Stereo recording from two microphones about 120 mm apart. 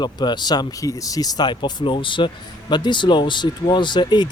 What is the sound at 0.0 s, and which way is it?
Speech, 35° left (ahead or behind).